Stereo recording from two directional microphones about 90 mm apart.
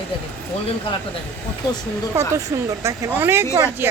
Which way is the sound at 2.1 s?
30° right (ahead or behind).